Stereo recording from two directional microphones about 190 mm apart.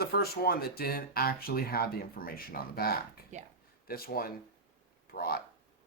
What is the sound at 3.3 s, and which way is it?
Speech, 40° right (ahead or behind).